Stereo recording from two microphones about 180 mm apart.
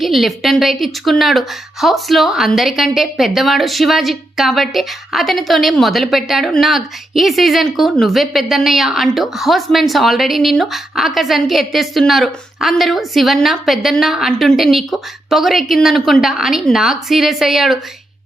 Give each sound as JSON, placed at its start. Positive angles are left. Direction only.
{"t": 0.0, "sound": "a woman's voice", "side_deg": 0}